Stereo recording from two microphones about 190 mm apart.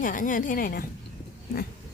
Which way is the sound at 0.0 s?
45° left (ahead or behind).